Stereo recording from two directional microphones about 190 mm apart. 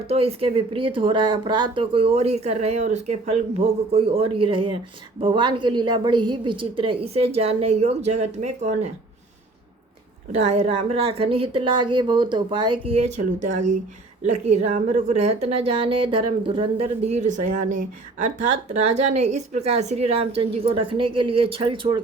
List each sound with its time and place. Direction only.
0.1 s speech: 30° right (ahead or behind)
10.3 s speech: 35° right (ahead or behind)